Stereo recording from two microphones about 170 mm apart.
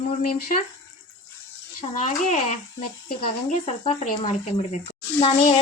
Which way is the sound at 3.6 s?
40° left (ahead or behind).